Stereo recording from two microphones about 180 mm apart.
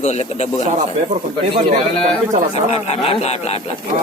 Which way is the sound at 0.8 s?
40° right (ahead or behind).